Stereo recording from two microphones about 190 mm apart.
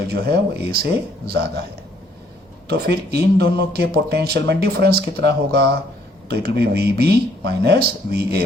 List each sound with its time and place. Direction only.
0.1 s speech: 55° right (ahead or behind)
2.6 s speech: 60° right (ahead or behind)